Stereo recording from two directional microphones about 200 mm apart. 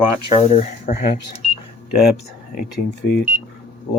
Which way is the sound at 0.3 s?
30° left (ahead or behind).